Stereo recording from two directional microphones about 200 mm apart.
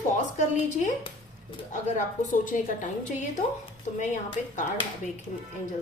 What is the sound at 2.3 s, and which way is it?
Speech, 40° left (ahead or behind).